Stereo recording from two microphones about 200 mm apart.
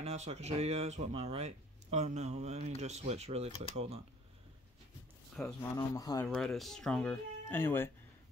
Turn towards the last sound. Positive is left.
turn(degrees=10)  # may be behind; listen again after turning